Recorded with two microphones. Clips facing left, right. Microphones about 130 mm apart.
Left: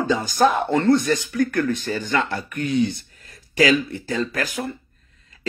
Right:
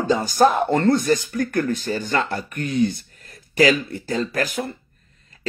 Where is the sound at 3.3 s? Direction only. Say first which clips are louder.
Right 2 dB; 45° right (ahead or behind).